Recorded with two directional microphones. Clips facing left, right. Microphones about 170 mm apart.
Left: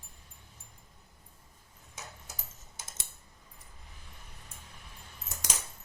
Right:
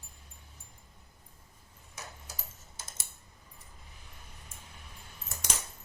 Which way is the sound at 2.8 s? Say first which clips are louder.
Even; 20° left (ahead or behind).